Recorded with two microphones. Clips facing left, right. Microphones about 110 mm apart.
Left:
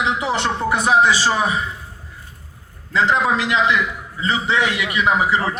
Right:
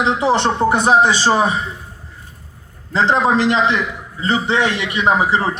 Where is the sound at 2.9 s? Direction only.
30° right (ahead or behind).